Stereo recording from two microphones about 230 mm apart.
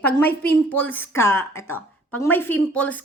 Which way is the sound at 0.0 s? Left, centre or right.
Centre.